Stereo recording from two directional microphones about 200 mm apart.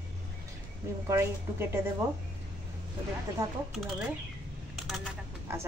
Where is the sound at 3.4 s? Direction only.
15° right (ahead or behind).